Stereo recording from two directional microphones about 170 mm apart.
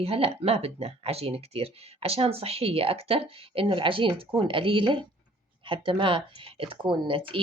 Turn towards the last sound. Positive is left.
turn(degrees=-30)  # may be behind; listen again after turning